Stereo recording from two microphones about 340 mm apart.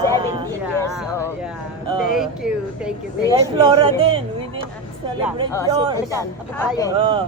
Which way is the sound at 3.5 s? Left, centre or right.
Centre.